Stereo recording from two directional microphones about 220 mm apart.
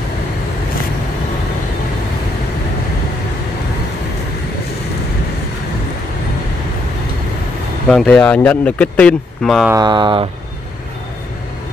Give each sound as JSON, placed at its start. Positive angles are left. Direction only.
{"t": 7.9, "sound": "speech", "side_deg": 0}
{"t": 9.7, "sound": "speech", "side_deg": -20}